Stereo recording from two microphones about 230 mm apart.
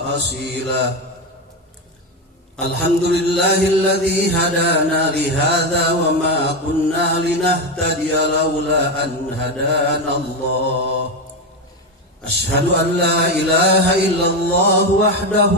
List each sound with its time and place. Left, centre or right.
0.0 s mantra: right
2.6 s mantra: right
12.3 s mantra: right